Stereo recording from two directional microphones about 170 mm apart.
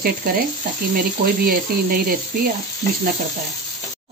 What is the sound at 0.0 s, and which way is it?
Speech, 60° right (ahead or behind).